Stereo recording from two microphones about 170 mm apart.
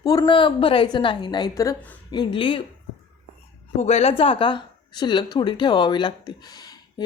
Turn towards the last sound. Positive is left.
turn(degrees=25)  # may be behind; listen again after turning